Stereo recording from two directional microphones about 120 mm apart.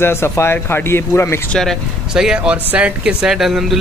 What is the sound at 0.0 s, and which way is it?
Speech, 20° left (ahead or behind).